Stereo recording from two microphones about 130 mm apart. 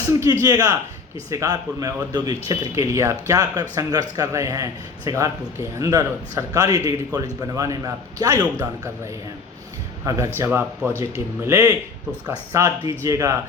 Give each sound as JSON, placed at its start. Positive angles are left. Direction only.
{"t": 0.1, "sound": "a man's voice", "side_deg": -25}
{"t": 10.0, "sound": "a man's voice", "side_deg": -25}